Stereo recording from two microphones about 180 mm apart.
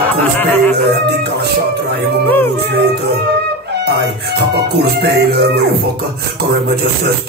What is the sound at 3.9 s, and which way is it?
Music, 65° right (ahead or behind).